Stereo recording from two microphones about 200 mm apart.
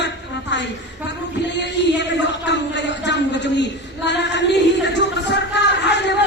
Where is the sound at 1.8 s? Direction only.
60° left (ahead or behind).